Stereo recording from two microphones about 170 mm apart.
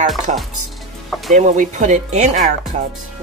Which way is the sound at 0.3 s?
45° right (ahead or behind).